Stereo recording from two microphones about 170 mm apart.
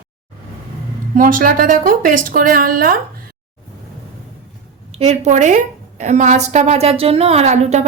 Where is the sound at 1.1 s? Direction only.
50° right (ahead or behind).